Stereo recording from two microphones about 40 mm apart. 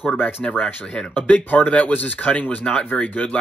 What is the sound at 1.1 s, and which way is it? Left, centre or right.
Speech, left.